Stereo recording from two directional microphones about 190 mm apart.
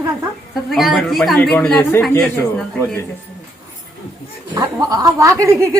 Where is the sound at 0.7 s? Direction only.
Centre (ahead or behind).